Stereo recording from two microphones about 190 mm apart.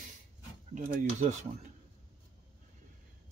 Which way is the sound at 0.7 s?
40° right (ahead or behind).